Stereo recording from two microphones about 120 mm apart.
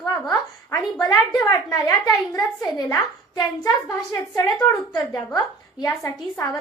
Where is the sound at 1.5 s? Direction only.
30° left (ahead or behind).